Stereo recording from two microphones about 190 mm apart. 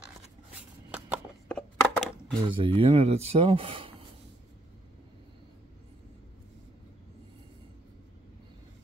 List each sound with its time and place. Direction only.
0.5 s shuffling cards: 5° right (ahead or behind)
1.5 s a sound: 5° left (ahead or behind)
2.5 s speech: 30° right (ahead or behind)